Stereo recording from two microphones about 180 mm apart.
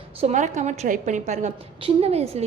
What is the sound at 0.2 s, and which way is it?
A woman's voice, 40° right (ahead or behind).